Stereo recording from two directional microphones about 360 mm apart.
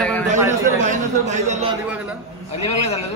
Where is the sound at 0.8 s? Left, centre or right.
Centre.